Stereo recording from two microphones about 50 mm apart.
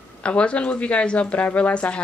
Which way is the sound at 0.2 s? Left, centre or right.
Left.